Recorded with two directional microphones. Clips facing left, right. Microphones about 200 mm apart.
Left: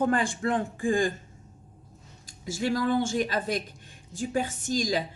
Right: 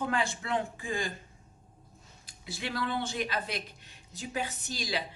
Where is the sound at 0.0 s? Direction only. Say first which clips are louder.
Left 7 dB; 50° left (ahead or behind).